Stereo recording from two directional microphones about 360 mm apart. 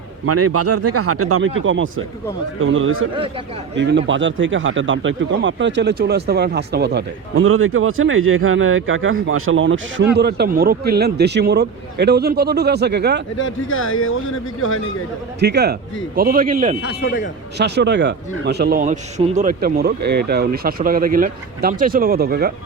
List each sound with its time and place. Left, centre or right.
0.3 s speech: right
13.4 s speech: left
15.4 s speech: right
17.0 s a man's voice: left
17.6 s speech: right